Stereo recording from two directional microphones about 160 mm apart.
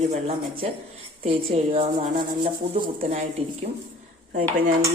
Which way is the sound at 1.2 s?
45° right (ahead or behind).